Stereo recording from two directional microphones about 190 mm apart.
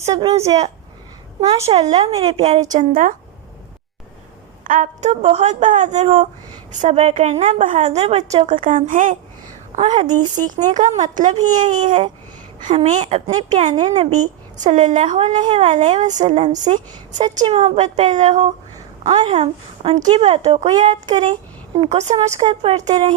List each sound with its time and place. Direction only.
0.1 s speech: 20° right (ahead or behind)
1.6 s a woman's voice: 30° right (ahead or behind)
2.7 s a woman's voice: 45° right (ahead or behind)
4.6 s a woman's voice: 40° right (ahead or behind)
22.4 s speech: 25° right (ahead or behind)